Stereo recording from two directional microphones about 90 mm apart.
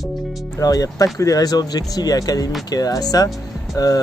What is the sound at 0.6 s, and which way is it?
Speech, 40° left (ahead or behind).